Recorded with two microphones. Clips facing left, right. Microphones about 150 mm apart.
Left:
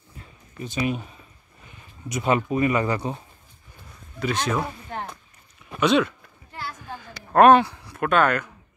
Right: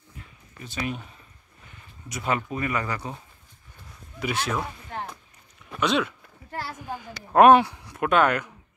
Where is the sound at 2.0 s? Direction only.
20° left (ahead or behind).